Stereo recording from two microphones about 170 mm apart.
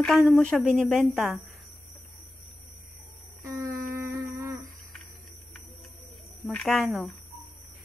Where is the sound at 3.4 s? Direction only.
15° right (ahead or behind).